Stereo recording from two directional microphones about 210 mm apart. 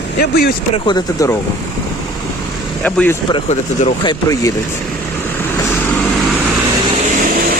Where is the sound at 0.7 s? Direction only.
20° left (ahead or behind).